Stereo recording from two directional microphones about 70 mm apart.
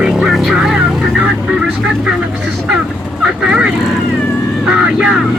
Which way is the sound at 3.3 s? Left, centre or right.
Centre.